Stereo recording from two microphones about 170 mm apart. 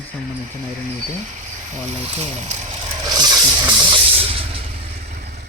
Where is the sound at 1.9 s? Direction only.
35° right (ahead or behind).